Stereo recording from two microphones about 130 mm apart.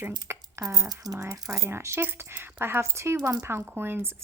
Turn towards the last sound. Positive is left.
turn(degrees=-20)  # may be behind; listen again after turning